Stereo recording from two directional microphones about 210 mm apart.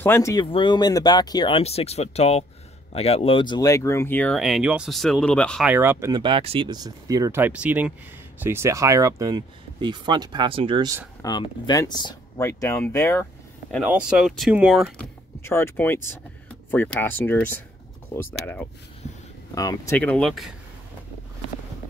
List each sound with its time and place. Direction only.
0.0 s speech: 15° left (ahead or behind)
5.7 s speech: 10° right (ahead or behind)
11.2 s speech: 20° left (ahead or behind)
13.8 s speech: 5° right (ahead or behind)
15.4 s speech: 10° left (ahead or behind)
20.0 s speech: 5° left (ahead or behind)